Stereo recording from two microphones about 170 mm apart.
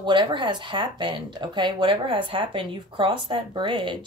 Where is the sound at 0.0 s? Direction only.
25° right (ahead or behind).